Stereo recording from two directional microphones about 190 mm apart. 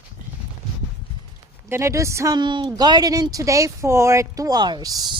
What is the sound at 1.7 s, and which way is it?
Speech, 15° right (ahead or behind).